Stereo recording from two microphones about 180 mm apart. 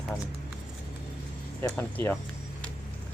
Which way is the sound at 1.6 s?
10° left (ahead or behind).